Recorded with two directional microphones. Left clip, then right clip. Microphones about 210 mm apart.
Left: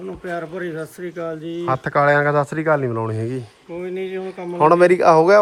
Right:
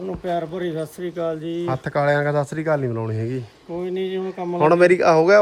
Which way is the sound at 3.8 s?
55° right (ahead or behind).